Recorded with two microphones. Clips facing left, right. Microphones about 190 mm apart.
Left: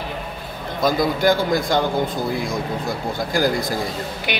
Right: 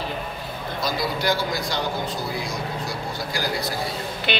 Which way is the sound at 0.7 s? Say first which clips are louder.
Left 7 dB; 50° left (ahead or behind).